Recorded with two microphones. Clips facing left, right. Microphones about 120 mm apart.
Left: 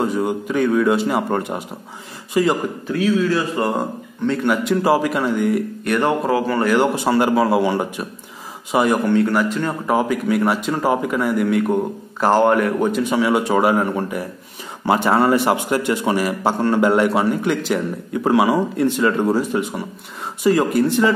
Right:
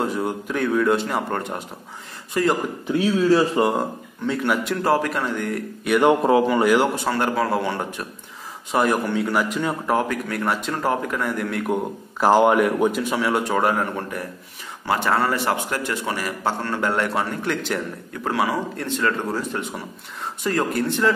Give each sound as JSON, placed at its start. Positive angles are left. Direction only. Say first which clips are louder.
{"t": 0.0, "sound": "a man's voice", "louder": "left 4 dB", "side_deg": 0}
{"t": 2.9, "sound": "speech", "louder": "even", "side_deg": -30}
{"t": 4.3, "sound": "a man's voice", "louder": "left 4 dB", "side_deg": 0}
{"t": 6.0, "sound": "a man's voice", "louder": "right 4 dB", "side_deg": -20}
{"t": 7.1, "sound": "a man's voice", "louder": "left 5 dB", "side_deg": 10}
{"t": 9.8, "sound": "a man's voice", "louder": "left 7 dB", "side_deg": 5}